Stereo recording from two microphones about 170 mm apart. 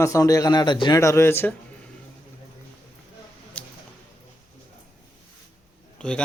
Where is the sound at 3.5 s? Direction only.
10° left (ahead or behind).